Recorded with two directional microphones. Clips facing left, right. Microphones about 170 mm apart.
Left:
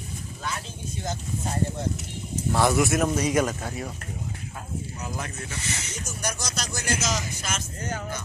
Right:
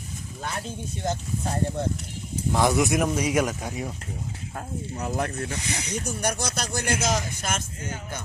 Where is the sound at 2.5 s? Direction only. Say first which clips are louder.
Even; 15° right (ahead or behind).